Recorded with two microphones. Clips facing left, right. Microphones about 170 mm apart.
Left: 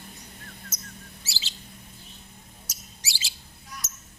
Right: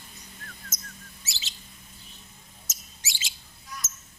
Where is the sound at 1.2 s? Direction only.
30° left (ahead or behind).